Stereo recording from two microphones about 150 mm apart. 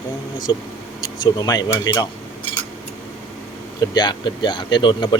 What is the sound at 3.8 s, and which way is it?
Speech, 30° left (ahead or behind).